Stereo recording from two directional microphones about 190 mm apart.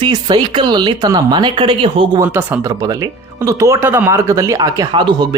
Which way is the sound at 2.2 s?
10° right (ahead or behind).